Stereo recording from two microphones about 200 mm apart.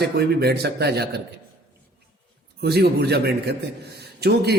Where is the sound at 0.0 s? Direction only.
55° right (ahead or behind).